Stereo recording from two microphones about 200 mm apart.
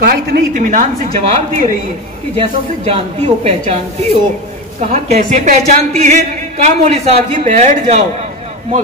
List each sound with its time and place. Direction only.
0.0 s a man's voice: 45° right (ahead or behind)
2.3 s a man's voice: 30° right (ahead or behind)